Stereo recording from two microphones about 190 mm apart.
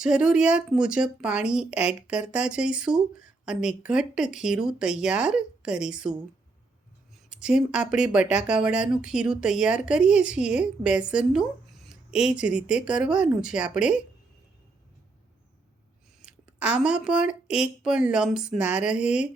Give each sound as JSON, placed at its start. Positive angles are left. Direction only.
{"t": 0.0, "sound": "speech", "side_deg": -5}
{"t": 16.2, "sound": "speech", "side_deg": -5}